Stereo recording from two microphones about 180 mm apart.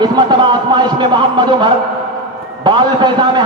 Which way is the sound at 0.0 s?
25° right (ahead or behind).